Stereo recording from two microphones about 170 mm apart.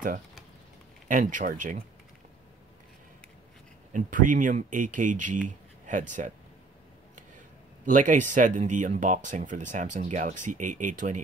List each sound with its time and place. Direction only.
1.0 s speech: 50° right (ahead or behind)
3.9 s speech: 50° right (ahead or behind)
7.8 s speech: 50° right (ahead or behind)